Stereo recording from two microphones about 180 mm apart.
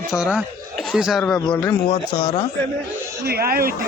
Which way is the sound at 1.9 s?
30° left (ahead or behind).